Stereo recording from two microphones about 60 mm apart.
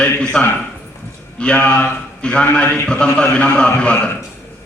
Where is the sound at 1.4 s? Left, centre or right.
Centre.